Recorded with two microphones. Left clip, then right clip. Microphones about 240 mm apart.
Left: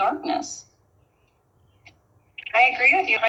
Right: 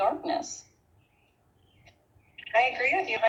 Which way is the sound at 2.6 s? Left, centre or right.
Left.